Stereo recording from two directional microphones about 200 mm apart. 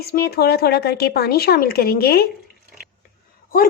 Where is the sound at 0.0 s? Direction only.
50° left (ahead or behind).